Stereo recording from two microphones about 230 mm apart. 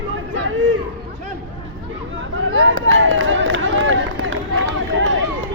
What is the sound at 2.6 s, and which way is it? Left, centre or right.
Run, right.